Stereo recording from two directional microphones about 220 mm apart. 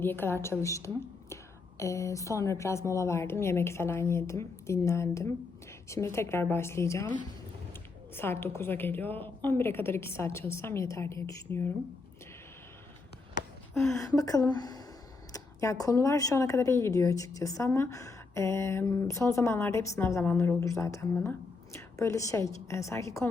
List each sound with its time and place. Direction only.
0.0 s speech: 10° left (ahead or behind)
13.7 s speech: 10° left (ahead or behind)